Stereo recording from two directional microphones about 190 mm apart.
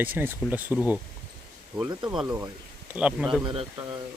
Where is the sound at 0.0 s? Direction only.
10° right (ahead or behind).